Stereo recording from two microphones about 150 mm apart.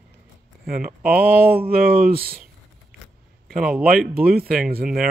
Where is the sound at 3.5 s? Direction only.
5° right (ahead or behind).